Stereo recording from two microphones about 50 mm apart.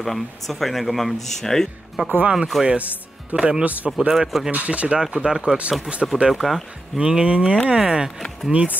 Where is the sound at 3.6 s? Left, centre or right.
Right.